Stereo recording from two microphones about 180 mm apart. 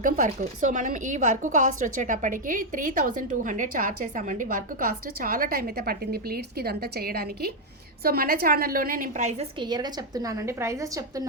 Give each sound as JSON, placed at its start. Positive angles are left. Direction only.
{"t": 0.0, "sound": "a woman's voice", "side_deg": -45}
{"t": 9.6, "sound": "a woman's voice", "side_deg": -25}